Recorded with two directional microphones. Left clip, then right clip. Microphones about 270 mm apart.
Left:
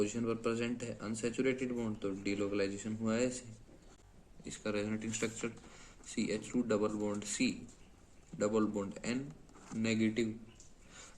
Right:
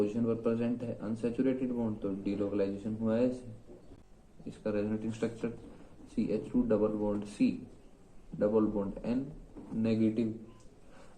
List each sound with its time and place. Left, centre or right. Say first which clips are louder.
0.0 s a man's voice: right 4 dB; left
4.4 s a man's voice: right 4 dB; left